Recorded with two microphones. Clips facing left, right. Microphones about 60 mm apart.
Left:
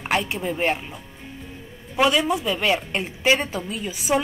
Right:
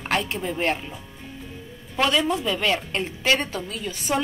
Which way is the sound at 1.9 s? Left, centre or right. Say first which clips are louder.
Left 2 dB; centre.